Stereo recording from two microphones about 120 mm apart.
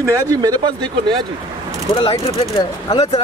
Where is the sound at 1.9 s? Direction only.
50° left (ahead or behind).